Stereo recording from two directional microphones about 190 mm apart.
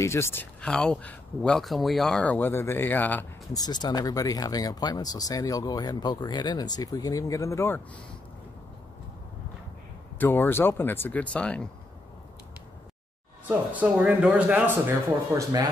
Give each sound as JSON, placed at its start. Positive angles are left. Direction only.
{"t": 0.0, "sound": "speech", "side_deg": 15}
{"t": 3.6, "sound": "speech", "side_deg": 20}
{"t": 10.1, "sound": "speech", "side_deg": 10}
{"t": 13.5, "sound": "speech", "side_deg": -10}